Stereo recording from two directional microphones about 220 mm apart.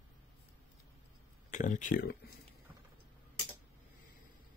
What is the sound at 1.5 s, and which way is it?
Speech, 35° left (ahead or behind).